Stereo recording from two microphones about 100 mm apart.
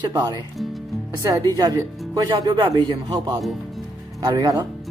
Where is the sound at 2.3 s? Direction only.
50° right (ahead or behind).